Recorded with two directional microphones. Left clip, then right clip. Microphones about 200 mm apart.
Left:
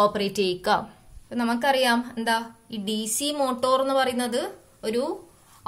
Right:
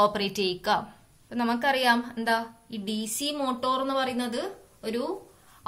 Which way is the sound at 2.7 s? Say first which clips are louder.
Left 6 dB; 25° left (ahead or behind).